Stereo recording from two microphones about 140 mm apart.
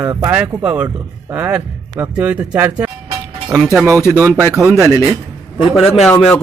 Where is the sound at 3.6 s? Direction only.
Centre (ahead or behind).